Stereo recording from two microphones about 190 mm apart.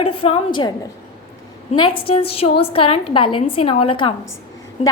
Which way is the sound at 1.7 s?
25° left (ahead or behind).